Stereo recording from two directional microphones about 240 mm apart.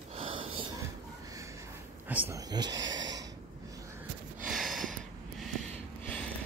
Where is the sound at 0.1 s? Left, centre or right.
Right.